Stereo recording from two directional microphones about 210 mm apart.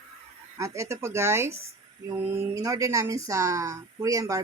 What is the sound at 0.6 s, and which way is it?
Speech, 15° right (ahead or behind).